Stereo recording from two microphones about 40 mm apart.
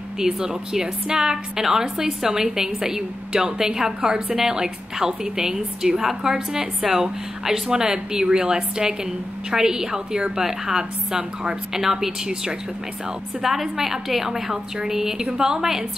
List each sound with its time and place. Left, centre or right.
0.4 s a woman's voice: centre
13.4 s a woman's voice: centre